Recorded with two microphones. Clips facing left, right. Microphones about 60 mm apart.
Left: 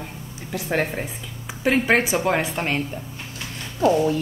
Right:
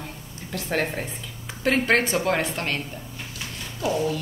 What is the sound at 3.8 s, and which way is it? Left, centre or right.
Speech, left.